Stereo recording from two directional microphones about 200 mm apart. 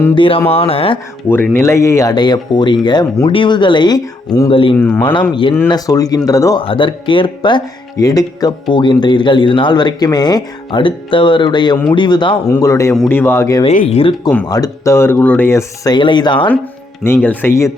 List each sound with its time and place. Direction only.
0.2 s speech: 25° left (ahead or behind)
1.3 s speech: 10° left (ahead or behind)
4.8 s speech: 10° left (ahead or behind)
5.3 s speech: 25° left (ahead or behind)
13.7 s speech: 35° left (ahead or behind)
14.4 s speech: 20° left (ahead or behind)
17.0 s speech: 10° left (ahead or behind)